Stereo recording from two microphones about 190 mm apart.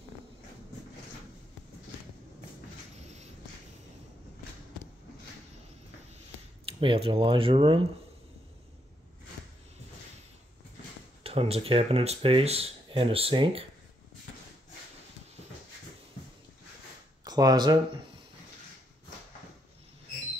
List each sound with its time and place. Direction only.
3.0 s a sound: 35° right (ahead or behind)
6.6 s speech: 30° right (ahead or behind)
11.2 s speech: 30° right (ahead or behind)
17.2 s speech: 20° right (ahead or behind)